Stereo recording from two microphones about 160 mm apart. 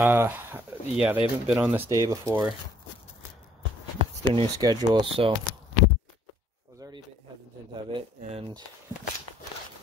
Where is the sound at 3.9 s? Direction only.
35° right (ahead or behind).